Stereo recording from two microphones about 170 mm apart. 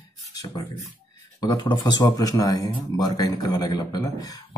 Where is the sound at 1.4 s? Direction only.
25° left (ahead or behind).